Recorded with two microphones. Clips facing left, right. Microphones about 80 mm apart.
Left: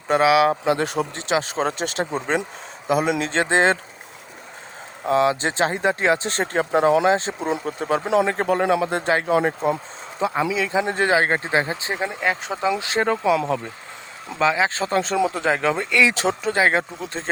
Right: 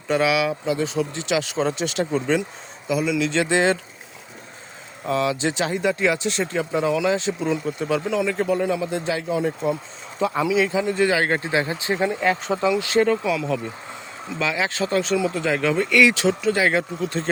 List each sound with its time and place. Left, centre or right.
0.2 s speech: left
0.6 s speech: left
5.0 s speech: left
8.0 s speech: left
10.2 s speech: left
11.9 s speech: centre
12.6 s speech: left
13.2 s speech: left
14.3 s speech: left
16.1 s speech: left